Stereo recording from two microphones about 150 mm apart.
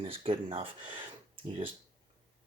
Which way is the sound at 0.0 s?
40° right (ahead or behind).